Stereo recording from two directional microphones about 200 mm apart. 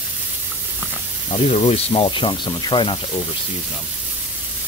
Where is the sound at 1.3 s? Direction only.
30° left (ahead or behind).